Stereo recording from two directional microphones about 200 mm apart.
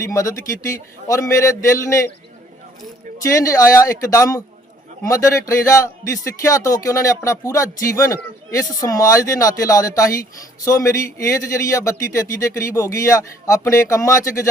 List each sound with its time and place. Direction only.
0.0 s a man's voice: 15° left (ahead or behind)
3.2 s a man's voice: 15° left (ahead or behind)